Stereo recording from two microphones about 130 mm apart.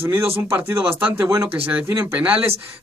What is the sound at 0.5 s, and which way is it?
Speech, 20° right (ahead or behind).